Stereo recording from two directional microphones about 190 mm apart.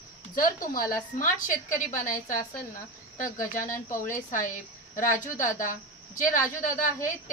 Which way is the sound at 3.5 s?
45° left (ahead or behind).